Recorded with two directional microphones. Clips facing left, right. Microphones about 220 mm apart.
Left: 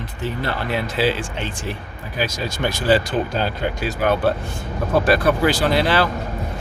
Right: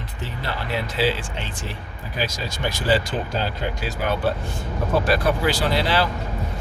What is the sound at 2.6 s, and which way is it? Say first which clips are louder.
Speech: left 4 dB; 55° left (ahead or behind).